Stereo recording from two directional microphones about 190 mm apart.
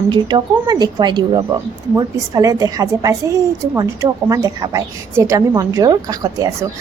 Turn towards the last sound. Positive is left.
turn(degrees=-20)  # may be behind; listen again after turning